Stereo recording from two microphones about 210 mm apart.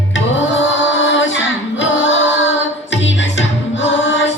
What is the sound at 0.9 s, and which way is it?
Music, 65° left (ahead or behind).